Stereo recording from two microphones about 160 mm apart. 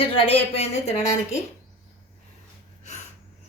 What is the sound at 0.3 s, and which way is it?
A woman's voice, 40° left (ahead or behind).